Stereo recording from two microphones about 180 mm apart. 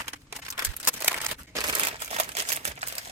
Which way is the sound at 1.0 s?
10° right (ahead or behind).